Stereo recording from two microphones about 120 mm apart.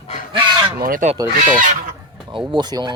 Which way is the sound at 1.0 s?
90° right.